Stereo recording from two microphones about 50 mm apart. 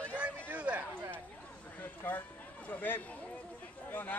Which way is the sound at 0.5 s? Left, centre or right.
Right.